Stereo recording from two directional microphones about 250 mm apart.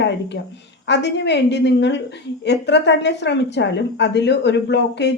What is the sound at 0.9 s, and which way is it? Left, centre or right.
Speech, left.